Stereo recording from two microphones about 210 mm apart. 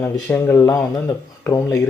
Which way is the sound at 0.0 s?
10° left (ahead or behind).